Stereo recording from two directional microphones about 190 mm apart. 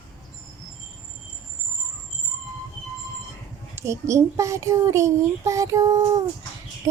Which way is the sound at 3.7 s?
15° right (ahead or behind).